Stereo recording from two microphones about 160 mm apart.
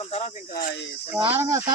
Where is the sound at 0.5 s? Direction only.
80° left.